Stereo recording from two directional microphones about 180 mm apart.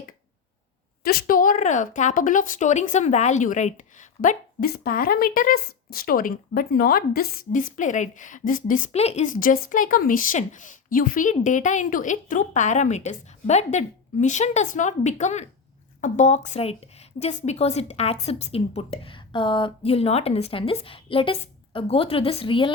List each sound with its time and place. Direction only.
1.0 s a woman's voice: 55° left (ahead or behind); by 22.7 s 30° left (ahead or behind)